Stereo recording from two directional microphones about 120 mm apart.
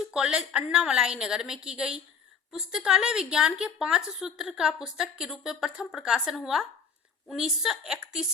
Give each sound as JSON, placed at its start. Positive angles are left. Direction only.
{"t": 0.0, "sound": "a woman's voice", "side_deg": -5}